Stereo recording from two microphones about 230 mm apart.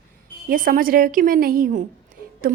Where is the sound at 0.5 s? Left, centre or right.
Right.